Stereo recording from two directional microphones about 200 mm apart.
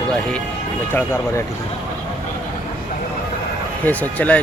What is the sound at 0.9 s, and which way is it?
Speech, 10° left (ahead or behind).